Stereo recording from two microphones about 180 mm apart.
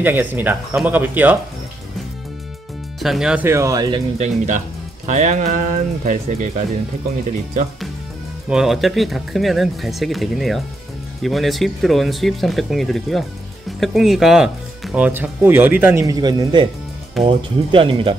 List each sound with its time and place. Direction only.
0.0 s speech: 10° right (ahead or behind)
3.0 s speech: centre (ahead or behind); by 4.0 s 20° right (ahead or behind)
4.2 s speech: 45° right (ahead or behind)
8.5 s speech: 5° right (ahead or behind); by 18.1 s 30° right (ahead or behind)